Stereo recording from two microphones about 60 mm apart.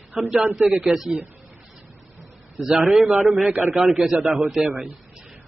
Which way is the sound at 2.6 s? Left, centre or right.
Centre.